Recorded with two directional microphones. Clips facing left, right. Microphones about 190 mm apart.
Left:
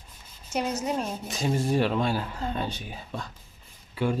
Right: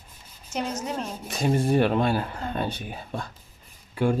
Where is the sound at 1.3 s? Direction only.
60° right (ahead or behind).